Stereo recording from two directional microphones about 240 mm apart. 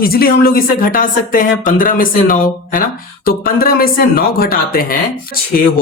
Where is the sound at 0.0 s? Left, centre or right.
Left.